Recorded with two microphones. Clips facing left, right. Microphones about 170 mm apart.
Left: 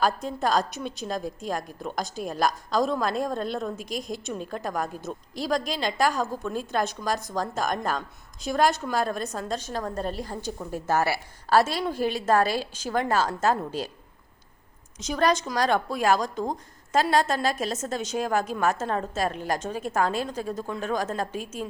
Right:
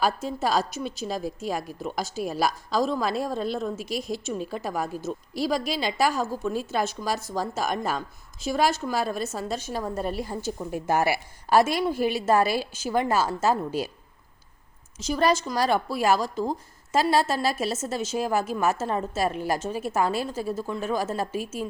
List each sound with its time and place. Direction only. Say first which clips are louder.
0.0 s a woman's voice: even; 5° right (ahead or behind)
14.9 s a woman's voice: right 1 dB; 5° right (ahead or behind)